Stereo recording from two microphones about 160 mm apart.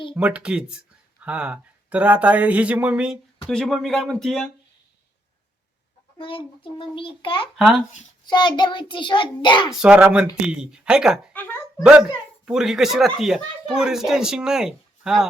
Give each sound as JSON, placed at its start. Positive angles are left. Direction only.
{"t": 0.1, "sound": "speech", "side_deg": -5}
{"t": 3.4, "sound": "speech", "side_deg": 5}
{"t": 6.1, "sound": "a child's voice", "side_deg": 35}
{"t": 7.5, "sound": "speech", "side_deg": 0}
{"t": 8.3, "sound": "child singing", "side_deg": 30}
{"t": 9.7, "sound": "speech", "side_deg": -5}
{"t": 11.3, "sound": "speech", "side_deg": 10}
{"t": 11.8, "sound": "speech", "side_deg": -5}